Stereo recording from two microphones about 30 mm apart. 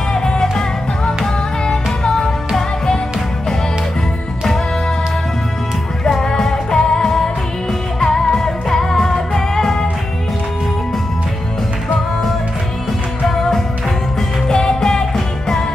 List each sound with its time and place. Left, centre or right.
0.1 s music: left
6.2 s music: left
13.3 s music: centre
14.5 s music: left